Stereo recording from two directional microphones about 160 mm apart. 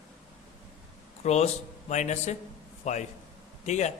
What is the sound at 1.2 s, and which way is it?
A man's voice, 45° left (ahead or behind).